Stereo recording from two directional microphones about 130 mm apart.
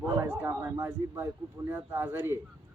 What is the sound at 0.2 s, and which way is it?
Speech, 15° right (ahead or behind).